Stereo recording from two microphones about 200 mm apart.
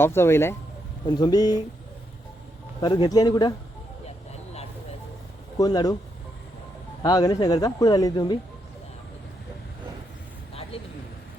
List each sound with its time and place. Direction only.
0.0 s speech: 10° left (ahead or behind)
2.8 s speech: 20° left (ahead or behind)
4.0 s vehicle: 30° left (ahead or behind)
5.5 s speech: 20° left (ahead or behind)
7.0 s speech: 20° left (ahead or behind)